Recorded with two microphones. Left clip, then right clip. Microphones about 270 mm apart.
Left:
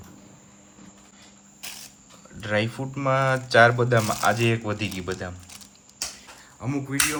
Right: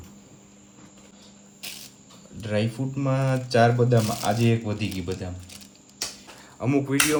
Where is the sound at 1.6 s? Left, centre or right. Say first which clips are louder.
Right 1 dB; centre.